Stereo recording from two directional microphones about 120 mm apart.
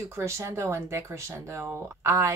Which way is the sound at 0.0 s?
25° right (ahead or behind).